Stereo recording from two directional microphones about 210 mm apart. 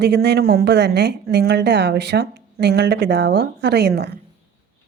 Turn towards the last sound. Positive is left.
turn(degrees=-50)  # may be behind; listen again after turning